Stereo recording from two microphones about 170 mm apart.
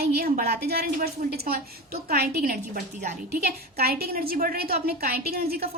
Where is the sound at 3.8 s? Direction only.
65° right (ahead or behind).